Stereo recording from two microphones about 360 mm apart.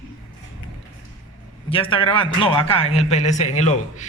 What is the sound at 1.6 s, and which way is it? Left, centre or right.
A man's voice, centre.